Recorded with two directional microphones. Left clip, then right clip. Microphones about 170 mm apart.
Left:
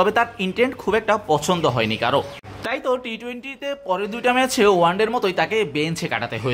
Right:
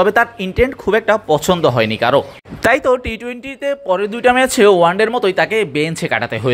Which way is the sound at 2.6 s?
45° right (ahead or behind).